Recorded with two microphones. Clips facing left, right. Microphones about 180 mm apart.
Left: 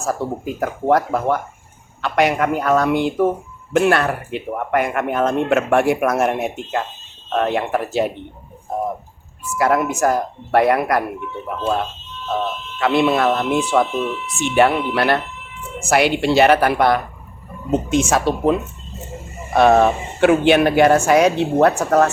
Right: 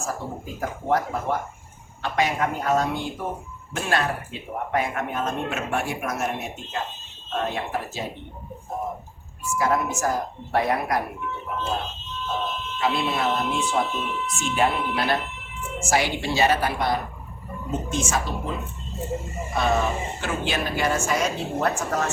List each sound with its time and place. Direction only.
0.0 s speech: 70° left (ahead or behind)
9.6 s speech: 70° left (ahead or behind)
12.8 s speech: 75° left (ahead or behind)
19.5 s speech: 65° left (ahead or behind)